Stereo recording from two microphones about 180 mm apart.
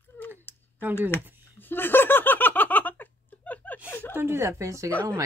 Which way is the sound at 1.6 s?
10° left (ahead or behind).